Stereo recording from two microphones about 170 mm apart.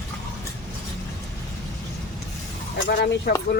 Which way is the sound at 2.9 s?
70° left (ahead or behind).